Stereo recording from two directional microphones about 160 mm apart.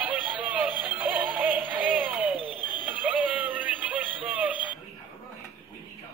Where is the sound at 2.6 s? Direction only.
30° left (ahead or behind).